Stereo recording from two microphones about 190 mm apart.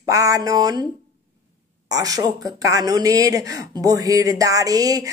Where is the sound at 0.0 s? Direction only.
15° right (ahead or behind).